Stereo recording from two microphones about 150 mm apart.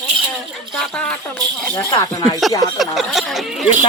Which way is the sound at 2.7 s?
Centre (ahead or behind).